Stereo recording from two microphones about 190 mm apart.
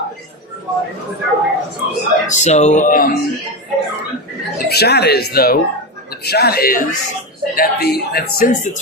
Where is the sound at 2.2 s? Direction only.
40° left (ahead or behind).